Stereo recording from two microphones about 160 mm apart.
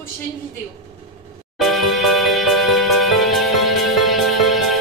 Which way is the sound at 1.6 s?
Centre (ahead or behind).